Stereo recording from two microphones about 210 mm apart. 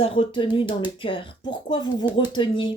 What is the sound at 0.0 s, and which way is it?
Speech, 25° left (ahead or behind).